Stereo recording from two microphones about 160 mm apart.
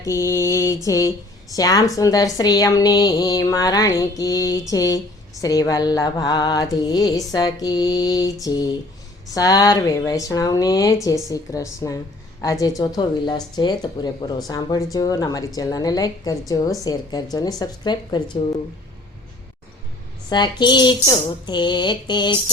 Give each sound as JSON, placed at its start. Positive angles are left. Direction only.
{"t": 0.0, "sound": "speech", "side_deg": 20}
{"t": 20.3, "sound": "speech", "side_deg": 30}